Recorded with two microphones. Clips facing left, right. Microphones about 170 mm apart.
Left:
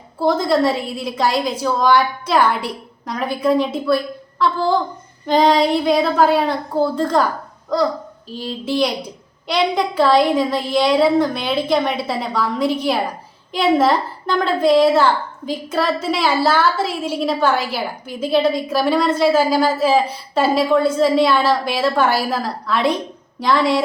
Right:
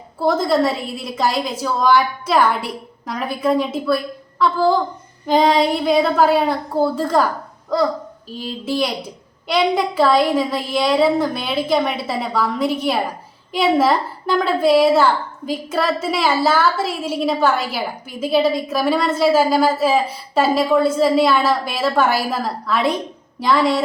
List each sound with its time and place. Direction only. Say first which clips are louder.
0.2 s a woman's voice: even; centre (ahead or behind)
8.3 s a woman's voice: left 1 dB; centre (ahead or behind)